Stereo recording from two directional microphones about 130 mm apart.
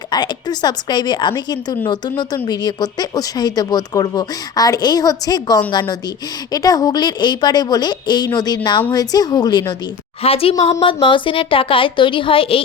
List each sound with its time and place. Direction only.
0.1 s speech: 35° left (ahead or behind)
10.2 s a woman's voice: 50° left (ahead or behind)